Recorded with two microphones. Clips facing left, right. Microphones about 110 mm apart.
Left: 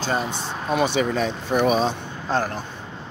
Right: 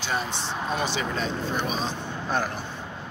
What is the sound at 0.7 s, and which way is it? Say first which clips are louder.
Speech: left 10 dB; 60° left (ahead or behind).